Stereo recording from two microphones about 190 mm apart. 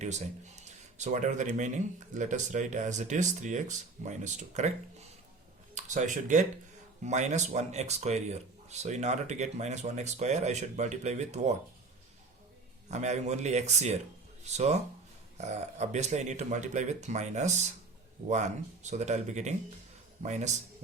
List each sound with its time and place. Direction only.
0.0 s speech: 35° right (ahead or behind)
5.7 s speech: 40° right (ahead or behind)
12.9 s speech: 35° right (ahead or behind)